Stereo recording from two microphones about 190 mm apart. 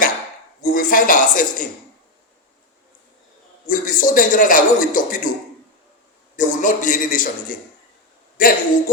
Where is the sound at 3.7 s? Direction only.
45° left (ahead or behind).